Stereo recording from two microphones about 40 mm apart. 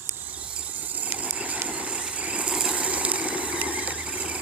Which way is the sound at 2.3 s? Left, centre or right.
Right.